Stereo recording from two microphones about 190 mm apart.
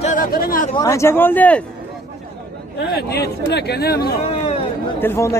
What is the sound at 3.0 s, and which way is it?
Speech, 60° left (ahead or behind).